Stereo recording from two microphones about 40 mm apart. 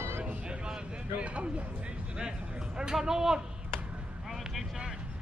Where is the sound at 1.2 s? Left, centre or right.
Right.